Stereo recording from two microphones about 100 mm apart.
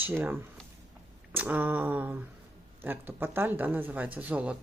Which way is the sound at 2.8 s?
20° right (ahead or behind).